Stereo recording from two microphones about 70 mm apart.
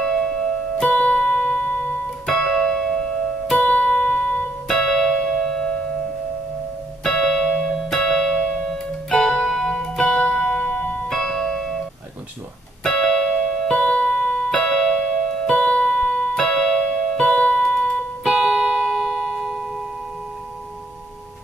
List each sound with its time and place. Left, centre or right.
0.0 s music: centre
2.2 s keyboard: centre
3.5 s music: centre
4.6 s music: centre
7.0 s music: centre
11.1 s music: centre
12.8 s music: centre